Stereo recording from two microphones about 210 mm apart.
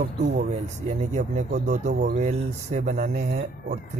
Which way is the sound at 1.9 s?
50° right (ahead or behind).